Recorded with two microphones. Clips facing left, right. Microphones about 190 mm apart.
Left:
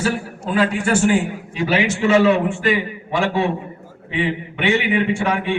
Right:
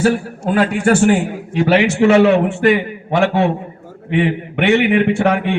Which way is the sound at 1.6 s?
65° right (ahead or behind).